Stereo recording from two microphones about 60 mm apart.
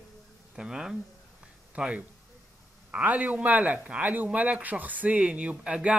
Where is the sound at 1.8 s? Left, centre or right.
Centre.